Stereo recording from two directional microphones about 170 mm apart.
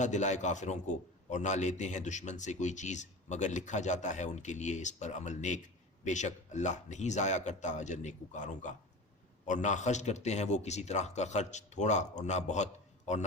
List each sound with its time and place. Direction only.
0.0 s a man's voice: 45° left (ahead or behind)